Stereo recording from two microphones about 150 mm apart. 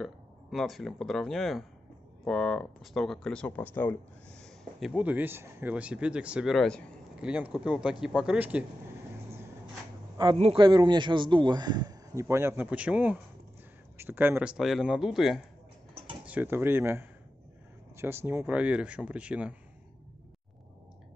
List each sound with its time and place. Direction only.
0.0 s speech: centre (ahead or behind)
4.4 s speech: centre (ahead or behind)
10.3 s a man's voice: 45° right (ahead or behind)
10.6 s speech: 30° right (ahead or behind); by 15.4 s centre (ahead or behind)
16.3 s speech: 15° right (ahead or behind)